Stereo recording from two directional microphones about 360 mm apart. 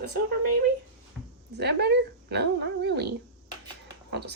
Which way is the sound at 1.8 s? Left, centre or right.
Right.